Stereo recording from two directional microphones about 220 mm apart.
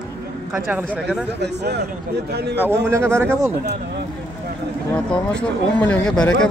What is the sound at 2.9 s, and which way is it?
Speech, 10° right (ahead or behind).